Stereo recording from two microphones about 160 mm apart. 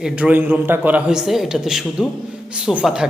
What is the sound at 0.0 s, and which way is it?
A man's voice, 10° right (ahead or behind).